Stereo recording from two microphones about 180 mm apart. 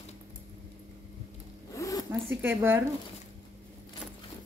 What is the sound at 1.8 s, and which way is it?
Zipper, 20° left (ahead or behind).